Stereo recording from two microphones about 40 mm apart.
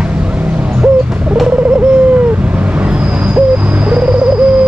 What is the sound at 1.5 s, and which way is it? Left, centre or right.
Bird, right.